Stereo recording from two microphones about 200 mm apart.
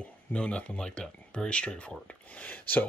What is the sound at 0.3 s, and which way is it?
Speech, 5° left (ahead or behind).